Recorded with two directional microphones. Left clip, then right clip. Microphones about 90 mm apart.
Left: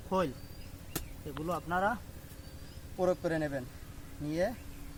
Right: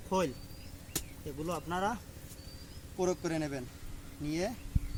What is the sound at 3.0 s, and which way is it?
A man's voice, 30° left (ahead or behind).